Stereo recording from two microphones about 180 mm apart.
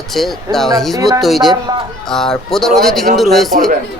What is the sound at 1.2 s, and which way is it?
Speech, centre (ahead or behind).